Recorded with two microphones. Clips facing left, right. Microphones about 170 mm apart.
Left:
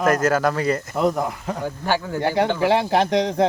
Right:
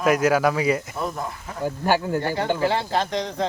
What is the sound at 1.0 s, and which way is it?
Speech, 70° left (ahead or behind).